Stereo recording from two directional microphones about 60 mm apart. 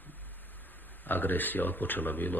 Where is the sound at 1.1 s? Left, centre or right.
Left.